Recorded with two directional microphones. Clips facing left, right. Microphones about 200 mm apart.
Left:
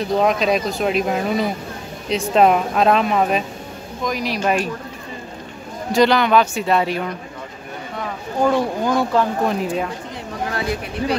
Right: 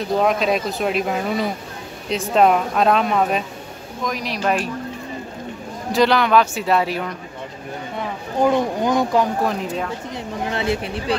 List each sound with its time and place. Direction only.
0.2 s speech: centre (ahead or behind)
5.9 s speech: centre (ahead or behind)
8.4 s speech: 20° right (ahead or behind)
10.5 s speech: 25° right (ahead or behind)